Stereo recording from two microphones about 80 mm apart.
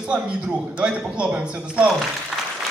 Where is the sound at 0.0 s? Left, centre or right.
Centre.